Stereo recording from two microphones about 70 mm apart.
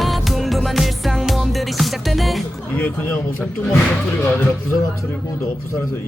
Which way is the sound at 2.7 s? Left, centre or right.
Left.